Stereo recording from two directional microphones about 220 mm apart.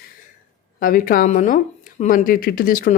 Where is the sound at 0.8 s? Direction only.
40° left (ahead or behind).